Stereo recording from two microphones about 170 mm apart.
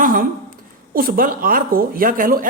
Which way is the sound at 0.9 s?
55° right (ahead or behind).